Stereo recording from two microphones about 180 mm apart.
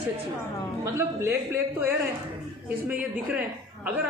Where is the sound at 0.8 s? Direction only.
15° right (ahead or behind).